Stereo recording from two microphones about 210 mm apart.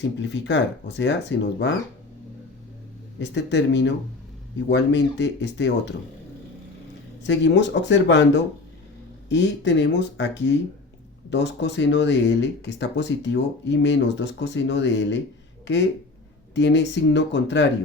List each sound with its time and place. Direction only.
0.0 s speech: 55° left (ahead or behind)
3.2 s speech: 55° left (ahead or behind)
7.2 s speech: 55° left (ahead or behind)